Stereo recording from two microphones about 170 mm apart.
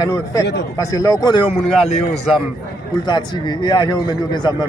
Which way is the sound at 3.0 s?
25° left (ahead or behind).